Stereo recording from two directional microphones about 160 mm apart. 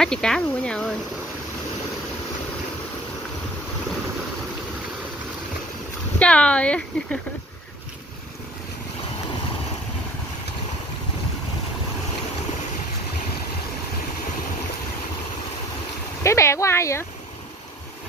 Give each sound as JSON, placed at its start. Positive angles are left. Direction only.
{"t": 0.0, "sound": "speech", "side_deg": 5}
{"t": 6.1, "sound": "speech", "side_deg": 5}
{"t": 16.2, "sound": "speech", "side_deg": 20}